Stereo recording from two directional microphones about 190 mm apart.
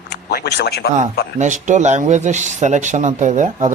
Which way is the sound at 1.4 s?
40° right (ahead or behind).